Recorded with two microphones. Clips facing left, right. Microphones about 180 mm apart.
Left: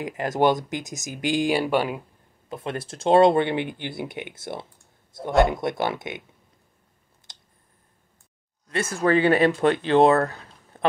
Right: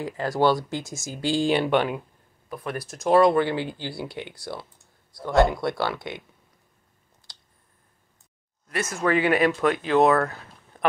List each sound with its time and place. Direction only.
0.0 s speech: 20° left (ahead or behind)
2.5 s speech: 25° left (ahead or behind)
8.6 s speech: 30° left (ahead or behind)